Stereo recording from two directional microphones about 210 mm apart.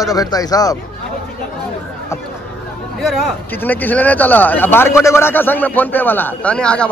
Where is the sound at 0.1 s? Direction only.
15° left (ahead or behind).